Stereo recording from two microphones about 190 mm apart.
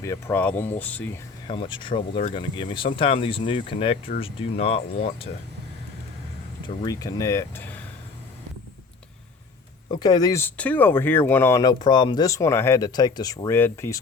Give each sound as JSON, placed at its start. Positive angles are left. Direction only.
{"t": 0.0, "sound": "speech", "side_deg": 15}
{"t": 1.5, "sound": "speech", "side_deg": 25}
{"t": 6.8, "sound": "speech", "side_deg": 20}
{"t": 9.9, "sound": "speech", "side_deg": 20}